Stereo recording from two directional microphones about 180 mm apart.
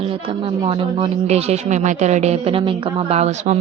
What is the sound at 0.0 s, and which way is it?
Speech, 30° right (ahead or behind).